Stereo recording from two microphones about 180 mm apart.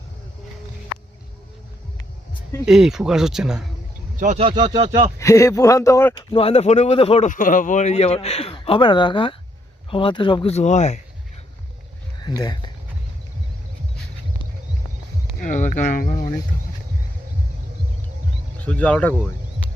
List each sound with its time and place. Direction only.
2.6 s speech: 5° right (ahead or behind)
4.2 s speech: 40° right (ahead or behind)
5.2 s speech: 15° left (ahead or behind)
6.1 s speech: 30° left (ahead or behind)
12.4 s speech: 25° left (ahead or behind)
15.4 s speech: 45° left (ahead or behind)
18.6 s speech: 5° left (ahead or behind)